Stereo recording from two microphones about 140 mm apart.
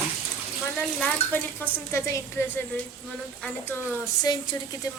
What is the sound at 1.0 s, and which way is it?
Speech, 10° left (ahead or behind).